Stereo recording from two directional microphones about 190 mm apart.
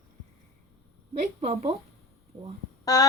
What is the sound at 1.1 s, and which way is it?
Speech, 35° right (ahead or behind).